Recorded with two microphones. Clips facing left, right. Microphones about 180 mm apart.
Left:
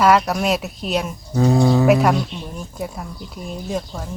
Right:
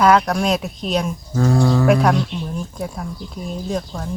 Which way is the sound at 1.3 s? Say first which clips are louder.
Left 2 dB; 15° left (ahead or behind).